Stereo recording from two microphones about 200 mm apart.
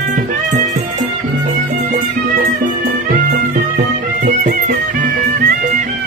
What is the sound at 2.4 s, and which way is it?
Music, 45° right (ahead or behind).